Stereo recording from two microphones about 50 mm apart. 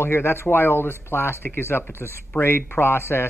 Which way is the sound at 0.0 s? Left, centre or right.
Left.